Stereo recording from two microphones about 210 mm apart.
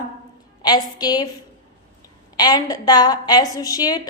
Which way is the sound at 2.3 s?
20° left (ahead or behind).